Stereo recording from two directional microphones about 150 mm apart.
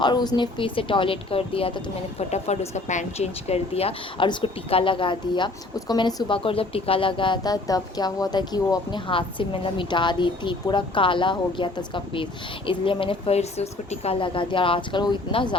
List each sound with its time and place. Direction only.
0.0 s speech: 30° left (ahead or behind)